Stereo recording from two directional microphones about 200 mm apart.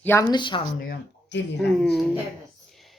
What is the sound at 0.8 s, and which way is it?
Speech, 60° left (ahead or behind).